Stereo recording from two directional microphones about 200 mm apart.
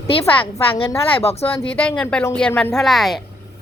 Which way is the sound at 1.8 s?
5° left (ahead or behind).